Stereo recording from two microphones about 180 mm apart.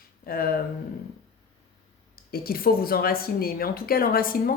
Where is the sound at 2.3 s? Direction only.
55° left (ahead or behind).